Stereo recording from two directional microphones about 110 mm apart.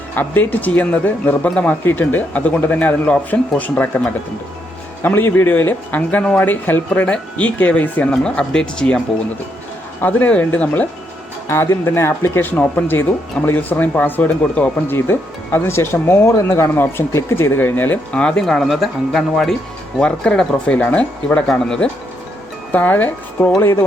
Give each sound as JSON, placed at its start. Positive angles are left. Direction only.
{"t": 0.2, "sound": "speech", "side_deg": 15}
{"t": 5.0, "sound": "speech", "side_deg": 20}
{"t": 10.0, "sound": "speech", "side_deg": 15}